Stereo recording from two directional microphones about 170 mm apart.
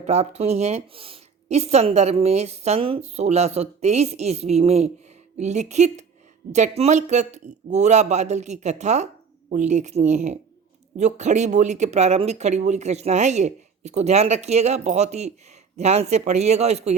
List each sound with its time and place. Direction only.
0.0 s a woman's voice: 40° right (ahead or behind)